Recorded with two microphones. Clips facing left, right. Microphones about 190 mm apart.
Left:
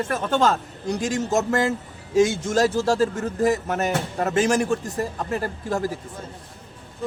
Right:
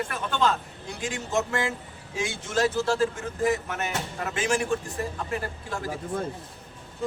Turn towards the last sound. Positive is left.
turn(degrees=40)  # may be behind; listen again after turning